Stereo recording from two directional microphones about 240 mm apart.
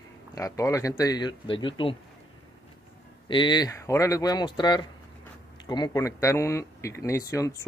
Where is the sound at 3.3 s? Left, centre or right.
Centre.